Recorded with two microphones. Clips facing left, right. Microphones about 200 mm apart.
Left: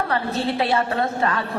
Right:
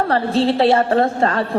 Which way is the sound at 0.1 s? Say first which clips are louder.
Right 7 dB; 30° right (ahead or behind).